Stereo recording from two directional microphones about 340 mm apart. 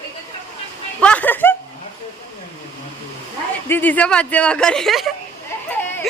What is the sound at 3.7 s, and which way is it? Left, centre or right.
Speech, centre.